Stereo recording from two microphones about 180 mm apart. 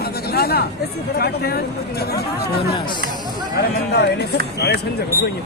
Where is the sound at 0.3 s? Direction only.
60° left (ahead or behind).